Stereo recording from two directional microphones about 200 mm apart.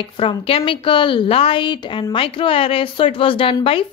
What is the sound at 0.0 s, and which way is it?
A woman's voice, 25° left (ahead or behind).